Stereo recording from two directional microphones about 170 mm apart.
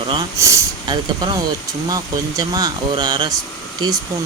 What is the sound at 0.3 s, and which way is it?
Speech, 20° right (ahead or behind).